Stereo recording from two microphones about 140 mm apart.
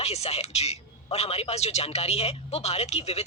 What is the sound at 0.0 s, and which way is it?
A man's voice, 50° left (ahead or behind).